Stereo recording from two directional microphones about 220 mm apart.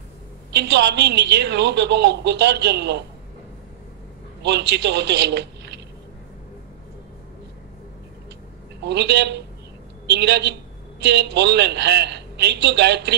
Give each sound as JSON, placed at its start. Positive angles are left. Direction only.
{"t": 0.5, "sound": "a woman's voice", "side_deg": -50}
{"t": 4.4, "sound": "a man's voice", "side_deg": -50}
{"t": 8.8, "sound": "a woman's voice", "side_deg": -50}